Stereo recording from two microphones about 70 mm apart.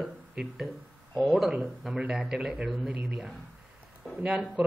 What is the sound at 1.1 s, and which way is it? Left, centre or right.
Speech, centre.